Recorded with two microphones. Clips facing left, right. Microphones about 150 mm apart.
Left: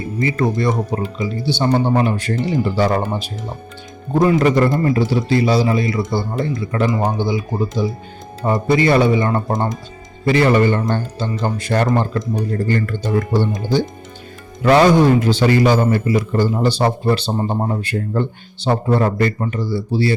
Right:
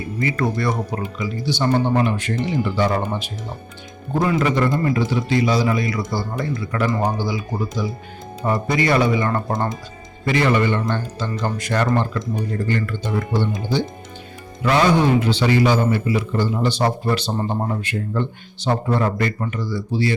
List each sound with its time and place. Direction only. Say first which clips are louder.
0.2 s speech: left 3 dB; 25° left (ahead or behind)
4.2 s speech: left 5 dB; 40° left (ahead or behind)
10.2 s a man's voice: left 4 dB; 35° left (ahead or behind)
17.7 s speech: left 3 dB; 40° left (ahead or behind)